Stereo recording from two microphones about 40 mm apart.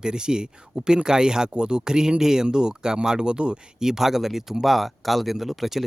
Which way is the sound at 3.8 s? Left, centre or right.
Centre.